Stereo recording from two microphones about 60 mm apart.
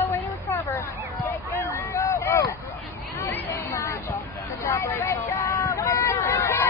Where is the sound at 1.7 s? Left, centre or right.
Left.